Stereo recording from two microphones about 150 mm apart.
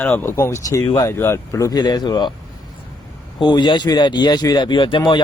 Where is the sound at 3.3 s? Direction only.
30° left (ahead or behind).